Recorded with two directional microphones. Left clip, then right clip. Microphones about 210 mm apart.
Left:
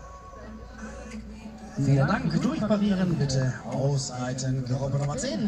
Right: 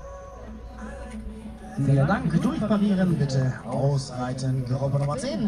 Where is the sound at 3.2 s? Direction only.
30° left (ahead or behind).